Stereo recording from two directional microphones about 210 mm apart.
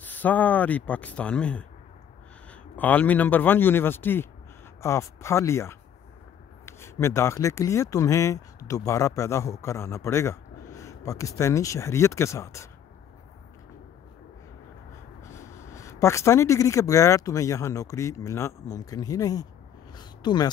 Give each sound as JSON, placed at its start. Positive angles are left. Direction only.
{"t": 0.0, "sound": "speech", "side_deg": 10}
{"t": 15.3, "sound": "speech", "side_deg": 15}